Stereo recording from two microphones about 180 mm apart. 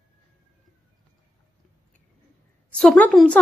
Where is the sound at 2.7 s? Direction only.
5° left (ahead or behind).